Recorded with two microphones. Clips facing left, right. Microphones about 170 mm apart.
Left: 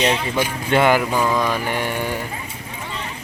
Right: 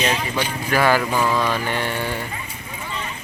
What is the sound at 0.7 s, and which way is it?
Speech, 20° left (ahead or behind).